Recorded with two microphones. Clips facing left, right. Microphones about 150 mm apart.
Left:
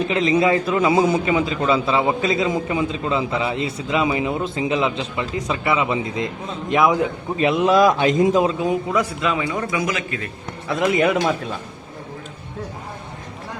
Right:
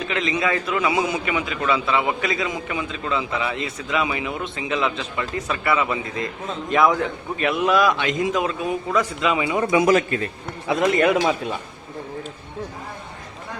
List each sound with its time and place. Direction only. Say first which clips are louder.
0.1 s a man's voice: left 5 dB; 30° left (ahead or behind)
7.8 s a man's voice: left 5 dB; 40° left (ahead or behind); by 8.8 s 20° left (ahead or behind)
8.9 s a man's voice: left 1 dB; 10° left (ahead or behind)
9.2 s speech: right 1 dB; 5° right (ahead or behind)
9.5 s a man's voice: right 4 dB; 20° right (ahead or behind)
9.8 s a man's voice: right 7 dB; 40° right (ahead or behind)
10.8 s speech: even; centre (ahead or behind)